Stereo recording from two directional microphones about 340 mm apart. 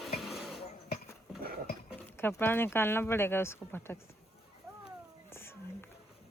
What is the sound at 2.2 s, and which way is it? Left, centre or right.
Speech, centre.